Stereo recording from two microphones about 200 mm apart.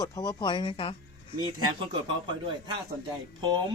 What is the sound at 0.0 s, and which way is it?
Speech, 15° left (ahead or behind).